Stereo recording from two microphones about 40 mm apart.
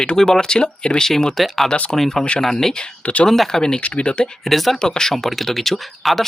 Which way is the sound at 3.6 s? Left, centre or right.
Left.